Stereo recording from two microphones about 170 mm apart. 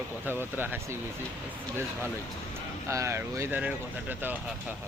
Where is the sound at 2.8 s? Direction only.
15° right (ahead or behind).